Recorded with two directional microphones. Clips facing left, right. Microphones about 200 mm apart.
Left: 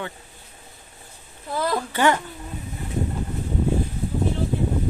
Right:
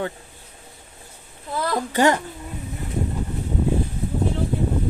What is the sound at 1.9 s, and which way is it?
Speech, 40° right (ahead or behind).